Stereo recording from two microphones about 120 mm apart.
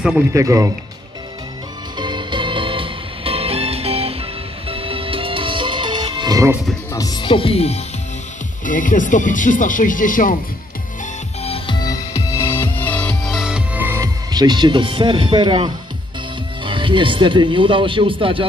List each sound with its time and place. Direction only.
0.3 s speech: 25° right (ahead or behind)
2.0 s music: 40° right (ahead or behind)
6.9 s music: 30° left (ahead or behind)
7.2 s speech: 45° left (ahead or behind)
8.6 s speech: 90° left
11.4 s music: 55° left (ahead or behind)
11.7 s music: 30° left (ahead or behind); by 13.3 s 10° left (ahead or behind)
13.3 s music: 5° right (ahead or behind)
14.0 s speech: 35° right (ahead or behind)